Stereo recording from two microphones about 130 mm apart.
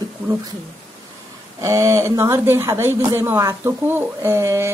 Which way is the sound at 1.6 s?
25° right (ahead or behind).